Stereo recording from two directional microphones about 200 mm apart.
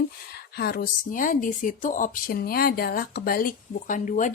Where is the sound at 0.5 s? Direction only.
50° left (ahead or behind).